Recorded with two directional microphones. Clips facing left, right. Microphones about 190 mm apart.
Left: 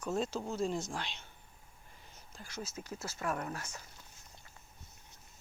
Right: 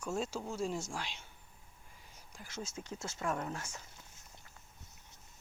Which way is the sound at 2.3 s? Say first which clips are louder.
Left 1 dB; 20° right (ahead or behind).